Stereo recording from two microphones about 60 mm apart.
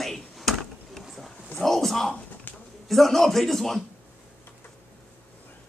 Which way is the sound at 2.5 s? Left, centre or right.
Left.